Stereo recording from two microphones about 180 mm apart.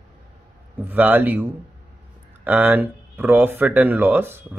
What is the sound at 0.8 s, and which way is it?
Speech, 10° right (ahead or behind).